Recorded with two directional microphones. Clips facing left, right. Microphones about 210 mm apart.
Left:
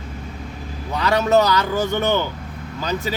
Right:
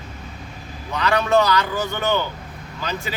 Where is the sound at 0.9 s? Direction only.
40° left (ahead or behind).